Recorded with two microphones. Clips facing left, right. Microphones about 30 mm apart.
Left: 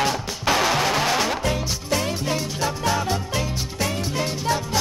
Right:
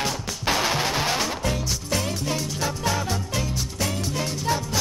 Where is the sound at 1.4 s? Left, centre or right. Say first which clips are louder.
Left 2 dB; centre.